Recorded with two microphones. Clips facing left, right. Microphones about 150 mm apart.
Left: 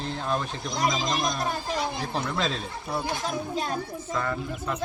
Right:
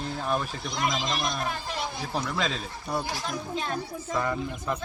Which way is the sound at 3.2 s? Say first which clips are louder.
Left 3 dB; 40° left (ahead or behind).